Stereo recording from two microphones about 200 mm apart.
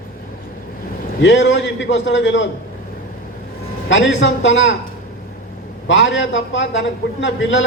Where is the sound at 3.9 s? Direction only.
65° left (ahead or behind).